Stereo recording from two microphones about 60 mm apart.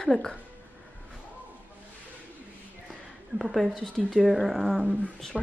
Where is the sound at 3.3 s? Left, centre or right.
Centre.